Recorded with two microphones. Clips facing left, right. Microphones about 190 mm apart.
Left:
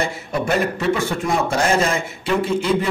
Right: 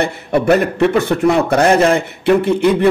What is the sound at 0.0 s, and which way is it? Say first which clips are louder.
A man's voice: right 7 dB; 65° right (ahead or behind).